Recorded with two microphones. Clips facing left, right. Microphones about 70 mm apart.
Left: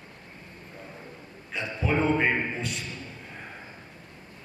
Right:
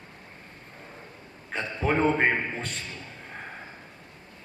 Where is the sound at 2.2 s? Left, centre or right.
Right.